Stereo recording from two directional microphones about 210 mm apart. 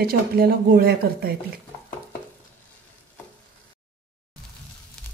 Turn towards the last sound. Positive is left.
turn(degrees=5)  # may be behind; listen again after turning